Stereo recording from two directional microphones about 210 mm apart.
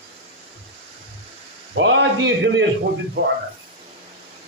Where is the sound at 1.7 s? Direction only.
60° right (ahead or behind).